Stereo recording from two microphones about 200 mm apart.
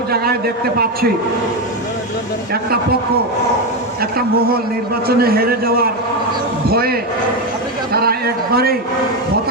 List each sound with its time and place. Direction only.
2.5 s a man's voice: 50° right (ahead or behind)
5.0 s a man's voice: 50° right (ahead or behind)